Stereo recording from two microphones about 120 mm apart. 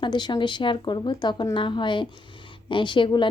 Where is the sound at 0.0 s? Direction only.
40° left (ahead or behind).